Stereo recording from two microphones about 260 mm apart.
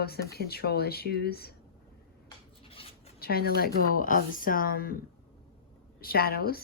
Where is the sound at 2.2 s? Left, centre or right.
Left.